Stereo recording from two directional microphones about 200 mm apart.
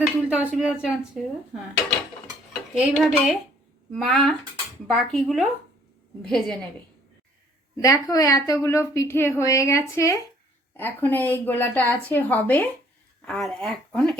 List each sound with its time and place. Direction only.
0.0 s speech: 5° right (ahead or behind)
2.7 s speech: centre (ahead or behind)
7.8 s speech: 15° left (ahead or behind)